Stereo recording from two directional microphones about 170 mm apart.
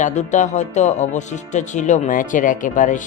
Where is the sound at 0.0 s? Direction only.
45° left (ahead or behind).